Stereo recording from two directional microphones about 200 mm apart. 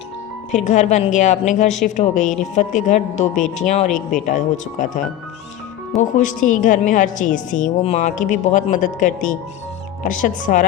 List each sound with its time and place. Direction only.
0.5 s a woman's voice: 35° left (ahead or behind)